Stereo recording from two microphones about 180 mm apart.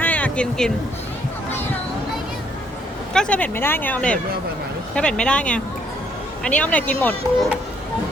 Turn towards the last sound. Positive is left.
turn(degrees=10)  # may be behind; listen again after turning